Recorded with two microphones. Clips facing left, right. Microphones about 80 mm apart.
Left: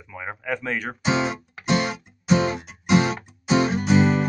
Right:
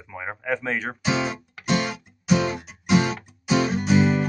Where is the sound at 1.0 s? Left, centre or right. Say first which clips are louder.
Left 3 dB; left.